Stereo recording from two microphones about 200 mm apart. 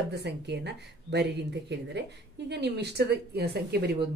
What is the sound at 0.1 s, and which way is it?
Speech, 55° right (ahead or behind).